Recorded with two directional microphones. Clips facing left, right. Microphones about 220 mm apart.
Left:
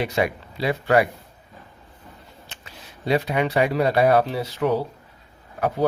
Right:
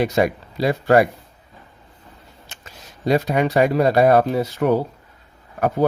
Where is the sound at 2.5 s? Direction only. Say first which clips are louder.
Right 1 dB; 45° right (ahead or behind).